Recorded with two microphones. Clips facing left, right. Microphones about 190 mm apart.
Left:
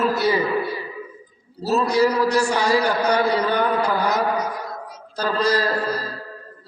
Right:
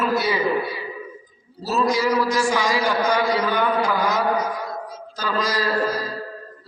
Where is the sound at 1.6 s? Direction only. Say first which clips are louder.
Left 3 dB; 35° left (ahead or behind).